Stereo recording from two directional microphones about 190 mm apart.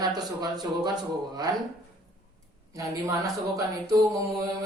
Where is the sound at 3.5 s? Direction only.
15° right (ahead or behind).